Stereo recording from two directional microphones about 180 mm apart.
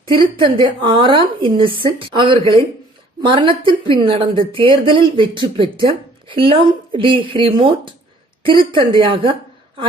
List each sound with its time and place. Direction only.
0.0 s a woman's voice: 25° right (ahead or behind)